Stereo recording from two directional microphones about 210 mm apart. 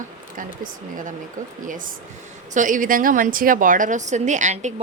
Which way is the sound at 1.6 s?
40° right (ahead or behind).